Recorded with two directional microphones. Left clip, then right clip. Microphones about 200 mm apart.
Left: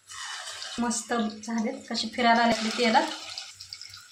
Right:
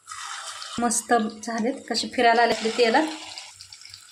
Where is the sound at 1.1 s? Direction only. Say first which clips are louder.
Right 7 dB; 60° right (ahead or behind).